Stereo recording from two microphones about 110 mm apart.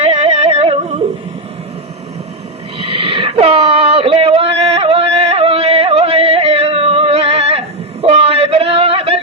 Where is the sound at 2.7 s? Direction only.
65° right (ahead or behind).